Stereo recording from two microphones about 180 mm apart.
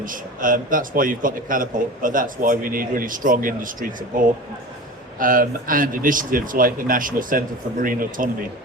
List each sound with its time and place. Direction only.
0.0 s a man's voice: 50° right (ahead or behind)
5.2 s a man's voice: 50° right (ahead or behind)